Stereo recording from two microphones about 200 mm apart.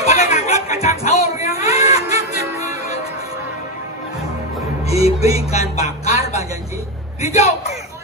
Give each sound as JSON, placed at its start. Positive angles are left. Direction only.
{"t": 0.0, "sound": "music", "side_deg": 35}
{"t": 1.8, "sound": "music", "side_deg": -15}
{"t": 4.8, "sound": "music", "side_deg": 30}
{"t": 7.2, "sound": "a man's voice", "side_deg": 30}